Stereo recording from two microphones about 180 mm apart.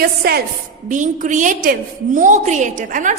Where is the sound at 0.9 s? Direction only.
45° right (ahead or behind).